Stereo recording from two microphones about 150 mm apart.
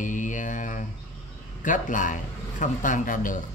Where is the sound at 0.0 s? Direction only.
60° left (ahead or behind).